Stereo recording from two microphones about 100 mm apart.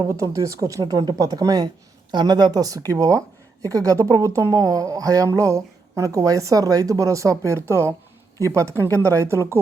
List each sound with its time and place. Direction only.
0.1 s a woman's voice: 30° right (ahead or behind)